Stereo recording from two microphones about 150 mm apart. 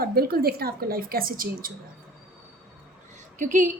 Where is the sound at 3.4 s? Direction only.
55° right (ahead or behind).